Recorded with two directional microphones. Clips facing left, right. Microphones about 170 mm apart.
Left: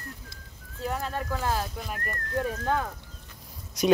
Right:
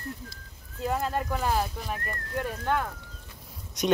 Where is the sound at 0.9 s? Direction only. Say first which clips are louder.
Right 3 dB; 15° right (ahead or behind).